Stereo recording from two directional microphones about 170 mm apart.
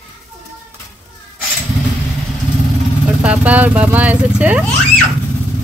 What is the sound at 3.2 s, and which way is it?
Speech, 10° right (ahead or behind).